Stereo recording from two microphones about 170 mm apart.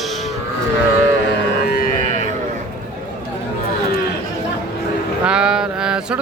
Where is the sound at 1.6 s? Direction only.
60° left (ahead or behind).